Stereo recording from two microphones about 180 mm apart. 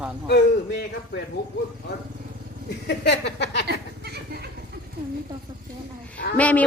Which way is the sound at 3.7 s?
65° right (ahead or behind).